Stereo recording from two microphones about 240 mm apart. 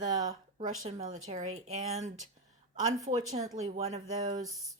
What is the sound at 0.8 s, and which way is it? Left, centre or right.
A woman's voice, right.